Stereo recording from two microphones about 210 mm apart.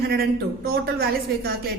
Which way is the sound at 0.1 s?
45° right (ahead or behind).